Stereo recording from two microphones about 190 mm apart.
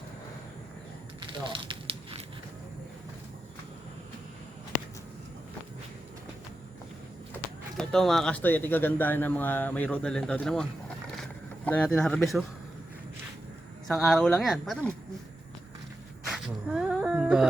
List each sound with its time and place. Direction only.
1.3 s fire: 25° right (ahead or behind)
7.3 s speech: 5° left (ahead or behind)
13.8 s speech: centre (ahead or behind)
16.2 s a sound: centre (ahead or behind)